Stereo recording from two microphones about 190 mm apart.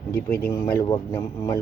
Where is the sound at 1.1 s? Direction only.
15° left (ahead or behind).